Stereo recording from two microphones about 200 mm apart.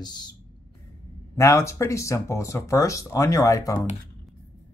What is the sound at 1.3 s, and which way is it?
Speech, 15° left (ahead or behind).